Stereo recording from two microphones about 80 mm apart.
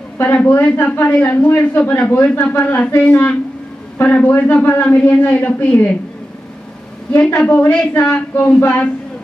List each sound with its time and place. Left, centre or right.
0.2 s speech: left
4.4 s speech: left
7.1 s a woman's voice: left